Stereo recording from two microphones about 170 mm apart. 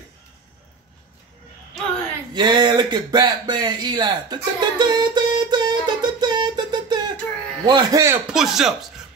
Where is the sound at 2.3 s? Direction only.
25° right (ahead or behind).